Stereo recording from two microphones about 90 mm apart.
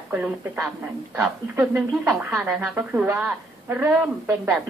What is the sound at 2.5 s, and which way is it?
A woman's voice, 20° right (ahead or behind).